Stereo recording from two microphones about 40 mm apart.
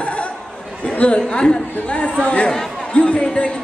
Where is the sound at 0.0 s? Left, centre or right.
Left.